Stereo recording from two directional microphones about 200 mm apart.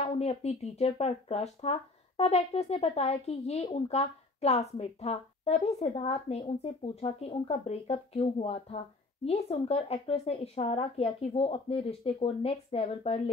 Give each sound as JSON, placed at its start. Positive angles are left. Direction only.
{"t": 0.0, "sound": "speech", "side_deg": 30}